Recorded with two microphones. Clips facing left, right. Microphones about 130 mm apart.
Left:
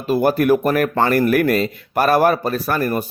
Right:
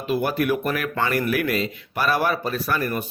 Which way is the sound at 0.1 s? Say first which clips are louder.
Left 7 dB; 40° left (ahead or behind).